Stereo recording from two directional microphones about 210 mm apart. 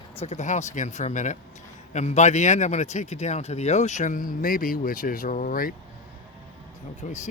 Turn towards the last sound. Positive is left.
turn(degrees=35)  # may be behind; listen again after turning